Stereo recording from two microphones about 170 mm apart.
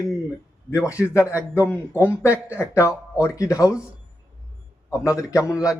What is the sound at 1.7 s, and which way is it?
A man's voice, 15° left (ahead or behind).